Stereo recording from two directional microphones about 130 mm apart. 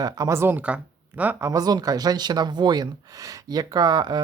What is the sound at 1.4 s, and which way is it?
Speech, 25° right (ahead or behind).